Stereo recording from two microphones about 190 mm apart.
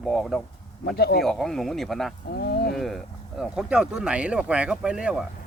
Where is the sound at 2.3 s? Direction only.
55° left (ahead or behind).